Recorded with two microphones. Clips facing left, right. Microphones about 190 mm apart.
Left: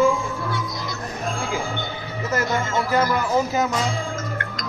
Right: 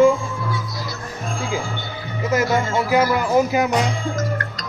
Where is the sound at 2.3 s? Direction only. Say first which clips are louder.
Right 4 dB; 10° right (ahead or behind).